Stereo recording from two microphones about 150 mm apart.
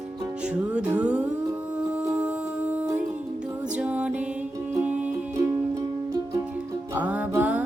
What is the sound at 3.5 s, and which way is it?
Music, 10° right (ahead or behind).